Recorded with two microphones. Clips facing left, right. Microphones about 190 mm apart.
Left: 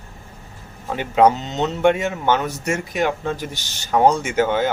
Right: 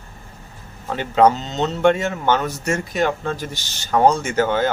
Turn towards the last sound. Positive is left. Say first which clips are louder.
# even
turn(degrees=15)  # may be behind; listen again after turning